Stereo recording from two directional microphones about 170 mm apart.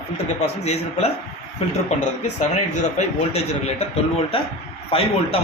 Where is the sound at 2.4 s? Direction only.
45° left (ahead or behind).